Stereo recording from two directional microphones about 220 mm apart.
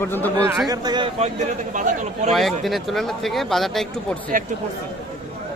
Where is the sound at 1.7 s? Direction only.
35° right (ahead or behind).